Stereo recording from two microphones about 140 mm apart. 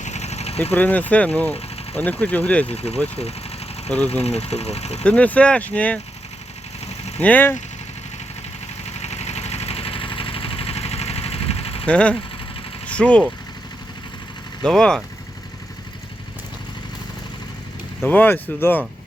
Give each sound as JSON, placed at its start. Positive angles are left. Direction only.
{"t": 0.0, "sound": "vehicle", "side_deg": 55}
{"t": 0.6, "sound": "speech", "side_deg": 15}
{"t": 2.6, "sound": "speech", "side_deg": 45}
{"t": 4.1, "sound": "speech", "side_deg": 50}
{"t": 5.0, "sound": "speech", "side_deg": 10}
{"t": 7.2, "sound": "speech", "side_deg": 10}
{"t": 8.8, "sound": "vehicle", "side_deg": 50}
{"t": 11.9, "sound": "speech", "side_deg": 10}
{"t": 14.6, "sound": "speech", "side_deg": 5}
{"t": 18.0, "sound": "speech", "side_deg": 15}